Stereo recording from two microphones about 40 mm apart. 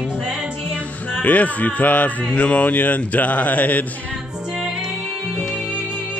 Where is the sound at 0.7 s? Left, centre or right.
Left.